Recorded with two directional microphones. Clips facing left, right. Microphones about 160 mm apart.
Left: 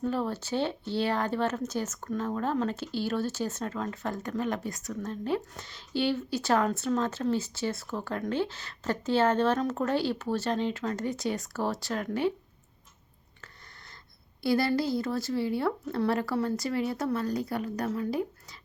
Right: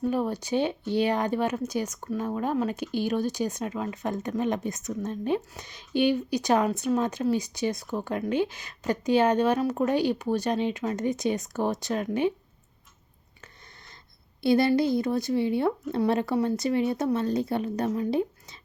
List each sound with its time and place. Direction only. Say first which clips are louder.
0.0 s speech: right 3 dB; 15° right (ahead or behind)
14.4 s speech: right 5 dB; 20° right (ahead or behind)